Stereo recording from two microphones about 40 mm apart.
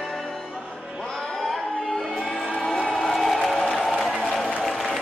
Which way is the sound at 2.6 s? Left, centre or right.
Left.